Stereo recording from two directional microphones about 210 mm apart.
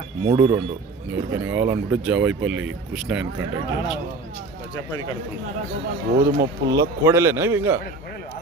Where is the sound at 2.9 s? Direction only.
5° right (ahead or behind).